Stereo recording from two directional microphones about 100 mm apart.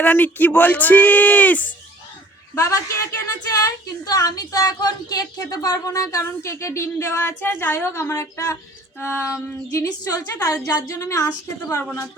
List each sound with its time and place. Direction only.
0.0 s speech: 20° left (ahead or behind)
2.6 s a woman's voice: 30° left (ahead or behind)
9.7 s a woman's voice: 35° left (ahead or behind)